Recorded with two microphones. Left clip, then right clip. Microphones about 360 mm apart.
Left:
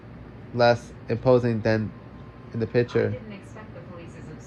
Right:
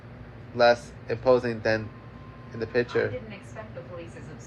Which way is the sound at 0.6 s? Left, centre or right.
Left.